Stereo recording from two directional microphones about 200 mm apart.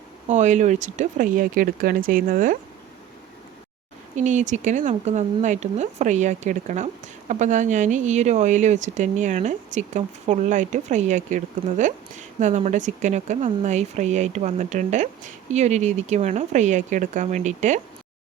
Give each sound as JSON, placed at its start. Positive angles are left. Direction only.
{"t": 0.3, "sound": "speech", "side_deg": -35}
{"t": 4.1, "sound": "speech", "side_deg": -35}